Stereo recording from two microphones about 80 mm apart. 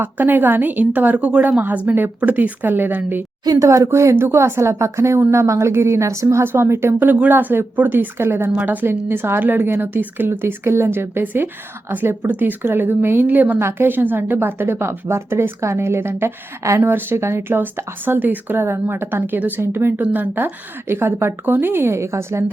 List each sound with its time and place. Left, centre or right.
0.0 s a woman's voice: right
3.4 s speech: right
3.7 s a woman's voice: right